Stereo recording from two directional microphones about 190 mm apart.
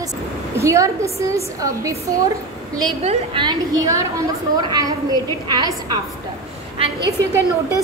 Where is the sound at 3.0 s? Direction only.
30° right (ahead or behind).